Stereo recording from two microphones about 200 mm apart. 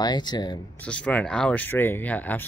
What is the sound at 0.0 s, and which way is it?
Speech, 20° left (ahead or behind).